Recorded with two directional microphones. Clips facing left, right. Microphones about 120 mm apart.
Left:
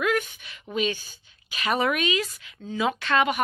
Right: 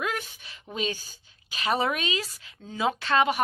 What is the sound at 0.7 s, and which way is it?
A woman's voice, 35° right (ahead or behind).